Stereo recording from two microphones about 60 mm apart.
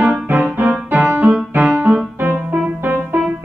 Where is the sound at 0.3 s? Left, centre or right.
Right.